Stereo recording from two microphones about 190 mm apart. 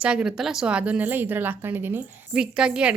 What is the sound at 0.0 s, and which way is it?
A woman's voice, 5° right (ahead or behind).